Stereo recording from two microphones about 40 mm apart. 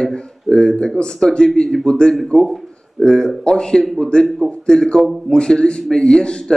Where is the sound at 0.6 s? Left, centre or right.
Centre.